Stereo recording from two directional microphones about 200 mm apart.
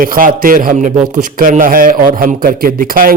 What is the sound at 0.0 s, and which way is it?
A man's voice, 45° right (ahead or behind).